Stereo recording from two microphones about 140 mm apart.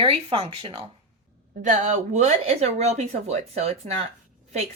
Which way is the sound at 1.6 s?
60° right (ahead or behind).